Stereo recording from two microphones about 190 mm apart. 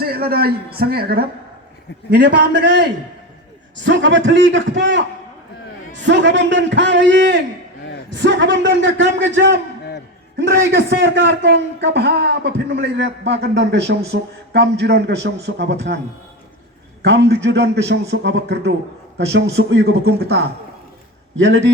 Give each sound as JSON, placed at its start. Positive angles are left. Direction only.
{"t": 0.0, "sound": "a man's voice", "side_deg": -55}
{"t": 10.3, "sound": "a man's voice", "side_deg": -50}
{"t": 17.0, "sound": "a man's voice", "side_deg": -65}
{"t": 21.3, "sound": "a man's voice", "side_deg": -75}